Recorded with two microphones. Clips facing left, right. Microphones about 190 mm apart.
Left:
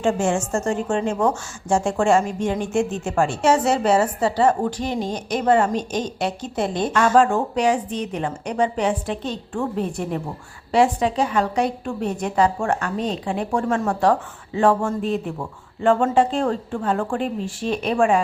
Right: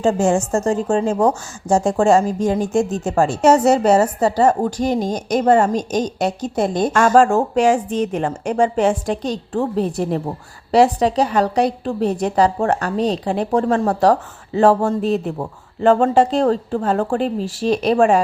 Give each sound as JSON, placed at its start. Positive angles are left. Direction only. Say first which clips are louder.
{"t": 0.0, "sound": "a woman's voice", "louder": "right 4 dB", "side_deg": -40}